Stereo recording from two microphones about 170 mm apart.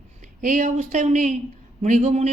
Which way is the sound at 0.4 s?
45° right (ahead or behind).